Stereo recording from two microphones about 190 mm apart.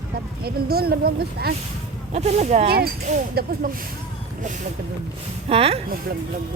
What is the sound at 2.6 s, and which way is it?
Speech, 55° right (ahead or behind).